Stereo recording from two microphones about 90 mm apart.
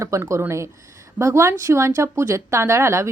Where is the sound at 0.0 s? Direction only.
35° right (ahead or behind).